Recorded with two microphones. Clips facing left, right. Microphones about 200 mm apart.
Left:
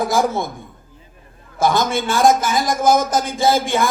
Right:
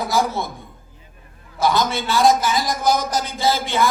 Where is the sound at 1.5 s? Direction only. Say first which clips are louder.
Left 2 dB; 50° left (ahead or behind).